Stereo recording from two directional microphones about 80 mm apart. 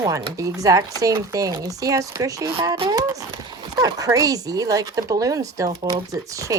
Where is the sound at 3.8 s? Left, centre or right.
Right.